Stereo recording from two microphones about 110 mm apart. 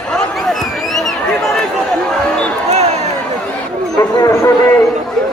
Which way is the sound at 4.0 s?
35° left (ahead or behind).